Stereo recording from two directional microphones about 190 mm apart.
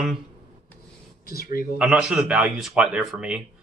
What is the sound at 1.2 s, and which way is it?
Speech, 50° left (ahead or behind).